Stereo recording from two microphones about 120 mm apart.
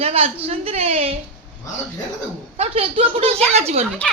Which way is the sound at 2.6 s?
55° right (ahead or behind).